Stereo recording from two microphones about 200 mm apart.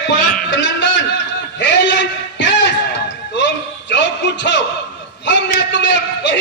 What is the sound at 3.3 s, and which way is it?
Music, 60° left (ahead or behind).